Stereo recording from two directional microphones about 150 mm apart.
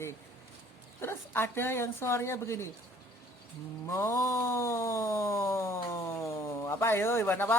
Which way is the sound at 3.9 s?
15° left (ahead or behind).